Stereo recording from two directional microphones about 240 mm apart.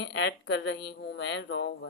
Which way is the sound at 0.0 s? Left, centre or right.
Left.